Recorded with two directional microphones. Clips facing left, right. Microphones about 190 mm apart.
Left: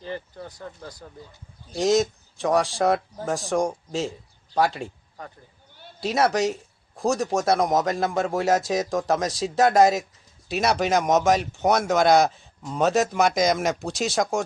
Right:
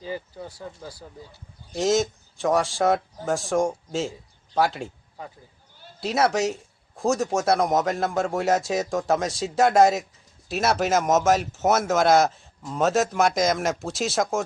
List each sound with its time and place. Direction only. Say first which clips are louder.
0.0 s speech: right 1 dB; 5° right (ahead or behind)